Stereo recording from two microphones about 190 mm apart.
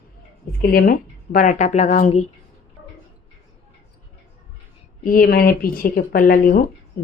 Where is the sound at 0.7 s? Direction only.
50° left (ahead or behind).